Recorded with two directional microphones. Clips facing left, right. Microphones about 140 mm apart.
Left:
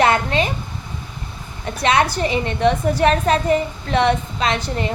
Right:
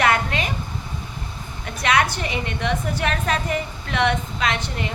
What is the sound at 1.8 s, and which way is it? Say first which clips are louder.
A woman's voice: left 4 dB; 30° left (ahead or behind).